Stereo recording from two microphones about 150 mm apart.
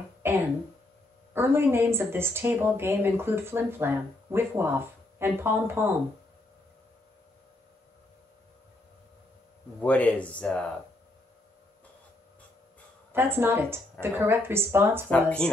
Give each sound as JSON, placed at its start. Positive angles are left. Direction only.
{"t": 0.2, "sound": "speech", "side_deg": -15}
{"t": 9.8, "sound": "speech", "side_deg": 10}
{"t": 13.1, "sound": "speech", "side_deg": -15}
{"t": 15.0, "sound": "speech", "side_deg": 10}